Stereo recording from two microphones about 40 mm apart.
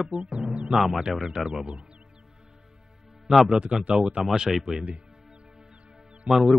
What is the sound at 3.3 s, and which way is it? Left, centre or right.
A man's voice, centre.